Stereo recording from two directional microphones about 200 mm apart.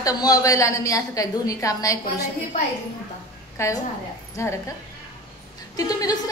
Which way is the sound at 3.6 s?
15° left (ahead or behind).